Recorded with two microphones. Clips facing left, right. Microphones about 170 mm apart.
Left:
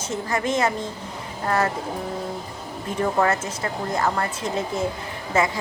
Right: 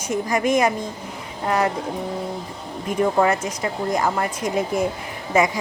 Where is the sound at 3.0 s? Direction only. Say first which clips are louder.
Right 3 dB; 15° right (ahead or behind).